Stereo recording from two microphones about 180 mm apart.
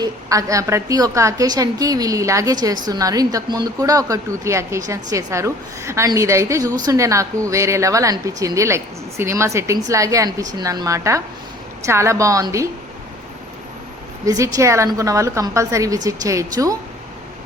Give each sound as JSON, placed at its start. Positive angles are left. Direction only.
{"t": 0.0, "sound": "a woman's voice", "side_deg": -20}
{"t": 14.3, "sound": "a woman's voice", "side_deg": -20}